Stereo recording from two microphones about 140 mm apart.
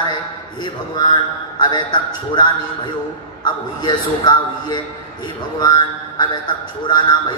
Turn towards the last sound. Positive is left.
turn(degrees=30)  # may be behind; listen again after turning